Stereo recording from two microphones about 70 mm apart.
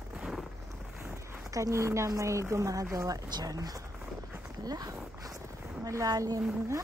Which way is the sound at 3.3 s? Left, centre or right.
Right.